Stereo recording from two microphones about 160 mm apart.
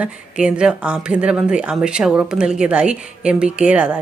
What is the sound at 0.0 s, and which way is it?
Speech, 5° right (ahead or behind).